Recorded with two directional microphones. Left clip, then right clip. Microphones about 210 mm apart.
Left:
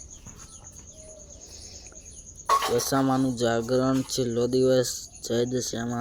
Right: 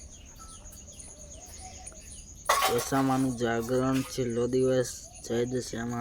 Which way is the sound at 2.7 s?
10° left (ahead or behind).